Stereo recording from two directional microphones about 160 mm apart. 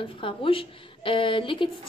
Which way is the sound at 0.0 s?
35° left (ahead or behind).